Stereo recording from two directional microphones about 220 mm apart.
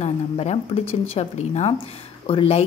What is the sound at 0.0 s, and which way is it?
Speech, 30° left (ahead or behind).